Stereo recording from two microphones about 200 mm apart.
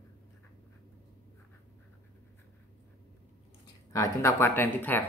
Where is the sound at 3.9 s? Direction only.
15° left (ahead or behind).